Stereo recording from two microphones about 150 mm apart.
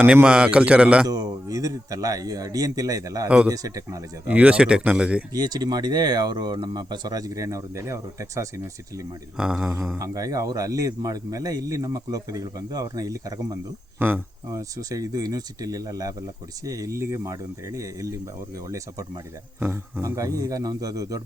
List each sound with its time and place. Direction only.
0.0 s a man's voice: 10° right (ahead or behind)
1.0 s speech: 25° right (ahead or behind)
3.2 s a man's voice: 10° right (ahead or behind)
3.5 s speech: 25° right (ahead or behind)
4.3 s a man's voice: 10° right (ahead or behind)
5.3 s speech: 25° right (ahead or behind)
9.4 s mantra: 5° right (ahead or behind)
10.0 s speech: 25° right (ahead or behind)
19.5 s speech: 15° right (ahead or behind)